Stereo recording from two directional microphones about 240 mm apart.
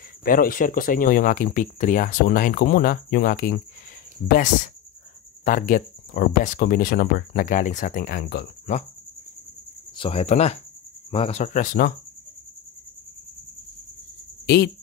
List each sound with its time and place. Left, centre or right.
0.2 s speech: left
5.4 s speech: left
9.9 s speech: left
14.4 s cricket: left